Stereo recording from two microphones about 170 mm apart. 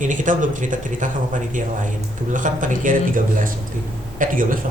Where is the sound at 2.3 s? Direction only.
50° right (ahead or behind).